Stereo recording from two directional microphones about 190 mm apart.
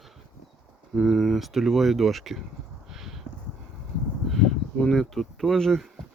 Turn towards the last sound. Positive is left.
turn(degrees=0)  # may be behind; listen again after turning